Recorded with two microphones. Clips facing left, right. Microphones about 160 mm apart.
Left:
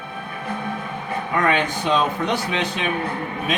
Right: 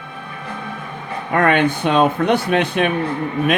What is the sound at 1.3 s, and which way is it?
Speech, 60° right (ahead or behind).